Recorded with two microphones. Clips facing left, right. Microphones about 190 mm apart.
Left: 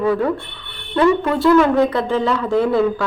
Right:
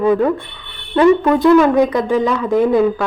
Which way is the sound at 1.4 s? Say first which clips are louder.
Right 3 dB; 15° right (ahead or behind).